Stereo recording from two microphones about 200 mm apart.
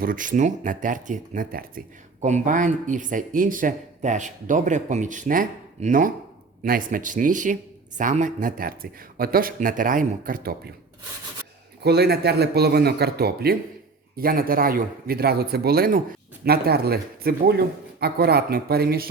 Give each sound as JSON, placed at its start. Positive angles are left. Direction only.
{"t": 0.0, "sound": "speech", "side_deg": -45}
{"t": 11.8, "sound": "speech", "side_deg": -55}